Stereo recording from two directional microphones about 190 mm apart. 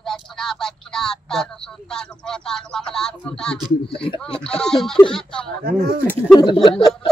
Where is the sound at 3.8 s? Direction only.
30° left (ahead or behind).